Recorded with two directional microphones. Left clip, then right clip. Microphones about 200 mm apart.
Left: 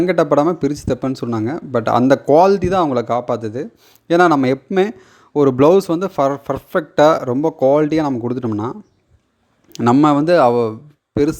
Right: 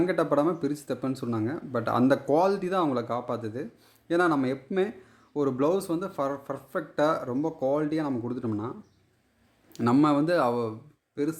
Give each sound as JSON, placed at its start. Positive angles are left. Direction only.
{"t": 0.0, "sound": "speech", "side_deg": 35}
{"t": 9.7, "sound": "speech", "side_deg": 35}